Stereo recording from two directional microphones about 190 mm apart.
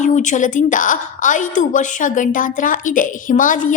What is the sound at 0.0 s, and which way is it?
A woman's voice, 40° left (ahead or behind).